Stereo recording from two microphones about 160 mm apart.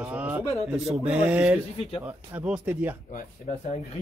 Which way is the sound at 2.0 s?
10° right (ahead or behind).